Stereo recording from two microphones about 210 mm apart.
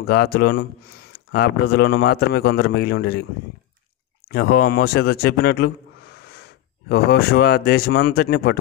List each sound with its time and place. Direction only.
0.0 s a man's voice: 50° left (ahead or behind)
4.3 s a man's voice: 45° left (ahead or behind)